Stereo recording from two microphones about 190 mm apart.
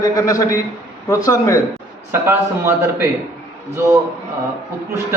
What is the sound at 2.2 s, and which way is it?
Speech, 15° right (ahead or behind).